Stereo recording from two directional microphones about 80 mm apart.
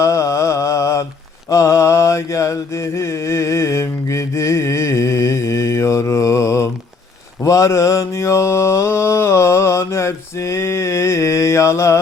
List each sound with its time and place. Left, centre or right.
0.0 s mantra: left